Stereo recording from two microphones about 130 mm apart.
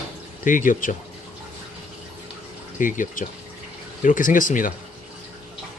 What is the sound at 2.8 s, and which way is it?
Speech, 90° left.